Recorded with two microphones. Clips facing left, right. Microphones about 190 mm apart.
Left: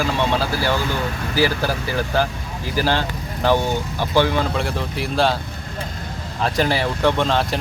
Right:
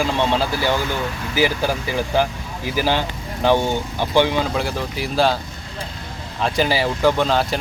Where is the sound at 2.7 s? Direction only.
15° right (ahead or behind).